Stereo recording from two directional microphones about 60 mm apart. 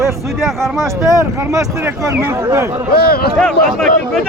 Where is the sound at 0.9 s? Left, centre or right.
Right.